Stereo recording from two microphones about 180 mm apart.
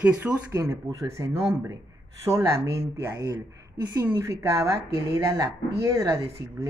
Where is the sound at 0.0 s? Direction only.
10° right (ahead or behind).